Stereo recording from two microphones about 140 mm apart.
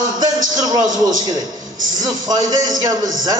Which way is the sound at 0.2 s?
30° right (ahead or behind).